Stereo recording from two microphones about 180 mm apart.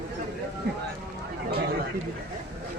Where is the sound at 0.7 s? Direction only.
65° right (ahead or behind).